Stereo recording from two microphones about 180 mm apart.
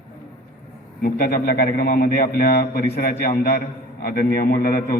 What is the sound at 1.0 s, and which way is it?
A man's voice, 55° left (ahead or behind).